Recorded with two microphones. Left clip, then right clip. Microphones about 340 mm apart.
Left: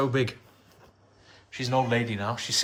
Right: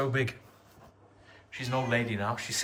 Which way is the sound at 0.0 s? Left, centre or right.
Centre.